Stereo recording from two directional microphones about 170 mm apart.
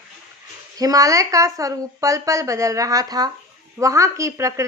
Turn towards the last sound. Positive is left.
turn(degrees=-20)  # may be behind; listen again after turning